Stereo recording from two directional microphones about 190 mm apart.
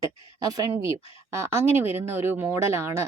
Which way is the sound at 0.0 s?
15° right (ahead or behind).